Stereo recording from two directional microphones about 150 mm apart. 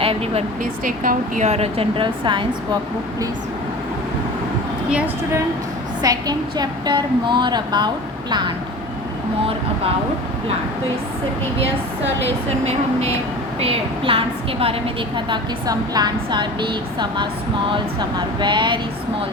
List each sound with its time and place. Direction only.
0.0 s speech: 40° right (ahead or behind)
0.6 s a woman's voice: 65° right (ahead or behind); by 2.6 s 30° right (ahead or behind)
6.0 s a woman's voice: 25° right (ahead or behind)
12.5 s a woman's voice: 45° right (ahead or behind)
18.3 s a woman's voice: 30° right (ahead or behind)